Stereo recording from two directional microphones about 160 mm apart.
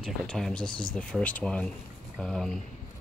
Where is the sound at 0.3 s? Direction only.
5° left (ahead or behind).